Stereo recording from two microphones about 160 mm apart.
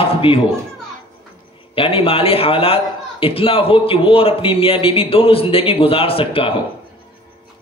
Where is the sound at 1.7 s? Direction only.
35° left (ahead or behind).